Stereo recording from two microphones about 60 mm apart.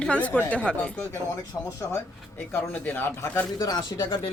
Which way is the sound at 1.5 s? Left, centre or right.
Left.